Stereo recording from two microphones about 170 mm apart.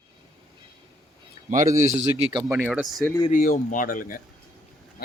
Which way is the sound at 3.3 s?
50° left (ahead or behind).